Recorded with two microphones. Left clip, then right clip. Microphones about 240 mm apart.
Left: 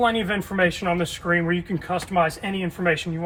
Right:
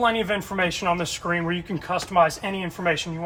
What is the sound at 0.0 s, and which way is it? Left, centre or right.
Speech, centre.